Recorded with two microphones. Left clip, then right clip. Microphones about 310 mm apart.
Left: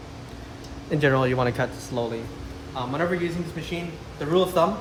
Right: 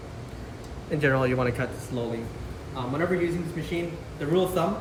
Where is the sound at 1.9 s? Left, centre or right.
Centre.